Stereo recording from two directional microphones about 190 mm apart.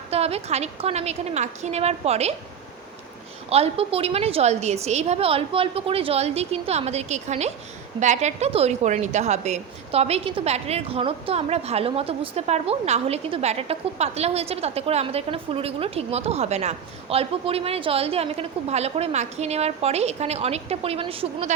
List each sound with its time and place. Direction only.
0.1 s a woman's voice: 35° right (ahead or behind)
3.5 s a woman's voice: 30° right (ahead or behind)